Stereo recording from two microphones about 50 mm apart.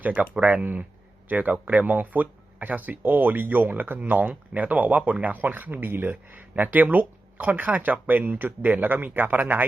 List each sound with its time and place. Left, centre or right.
0.0 s speech: right
4.0 s speech: right